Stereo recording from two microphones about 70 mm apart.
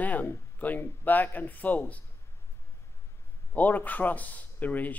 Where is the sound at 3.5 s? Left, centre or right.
Left.